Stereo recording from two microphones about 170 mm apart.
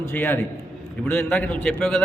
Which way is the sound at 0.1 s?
10° left (ahead or behind).